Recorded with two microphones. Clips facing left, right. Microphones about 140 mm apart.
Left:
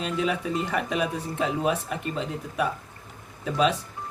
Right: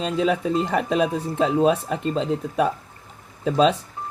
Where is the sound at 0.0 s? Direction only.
30° right (ahead or behind).